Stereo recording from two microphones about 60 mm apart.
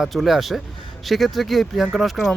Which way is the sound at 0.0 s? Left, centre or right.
Centre.